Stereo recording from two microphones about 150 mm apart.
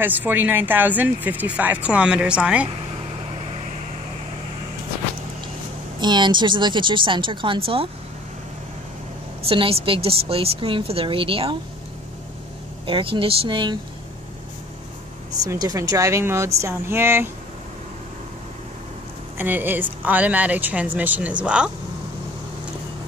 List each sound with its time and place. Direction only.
0.0 s speech: 10° right (ahead or behind)
5.9 s a woman's voice: 30° right (ahead or behind)
9.5 s a woman's voice: 40° right (ahead or behind)
12.8 s a woman's voice: 35° right (ahead or behind)
15.4 s speech: 25° right (ahead or behind)
19.3 s speech: 15° right (ahead or behind)